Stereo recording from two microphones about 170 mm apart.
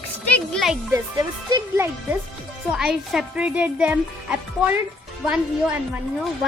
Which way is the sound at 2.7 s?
5° right (ahead or behind).